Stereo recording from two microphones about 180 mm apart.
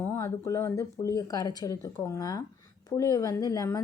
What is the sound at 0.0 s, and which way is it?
Speech, 15° left (ahead or behind).